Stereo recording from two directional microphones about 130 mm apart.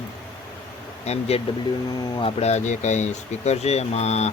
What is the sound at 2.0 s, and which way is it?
Speech, 30° left (ahead or behind).